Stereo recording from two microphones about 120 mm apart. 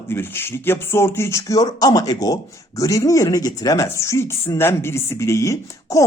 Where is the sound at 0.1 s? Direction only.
20° left (ahead or behind).